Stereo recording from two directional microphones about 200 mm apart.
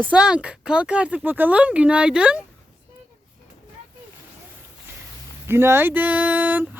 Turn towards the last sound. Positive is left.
turn(degrees=-10)  # may be behind; listen again after turning